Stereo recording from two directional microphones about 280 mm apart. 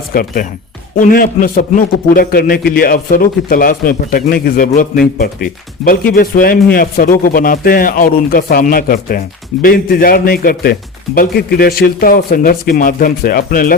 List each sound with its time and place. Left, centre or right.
0.1 s speech: left